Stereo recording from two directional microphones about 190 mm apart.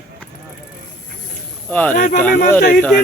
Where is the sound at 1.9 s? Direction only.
45° left (ahead or behind).